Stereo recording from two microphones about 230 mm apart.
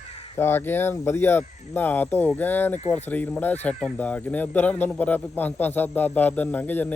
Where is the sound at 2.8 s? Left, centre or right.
Left.